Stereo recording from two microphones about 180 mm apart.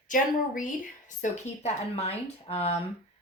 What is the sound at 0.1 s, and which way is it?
A woman's voice, 45° left (ahead or behind).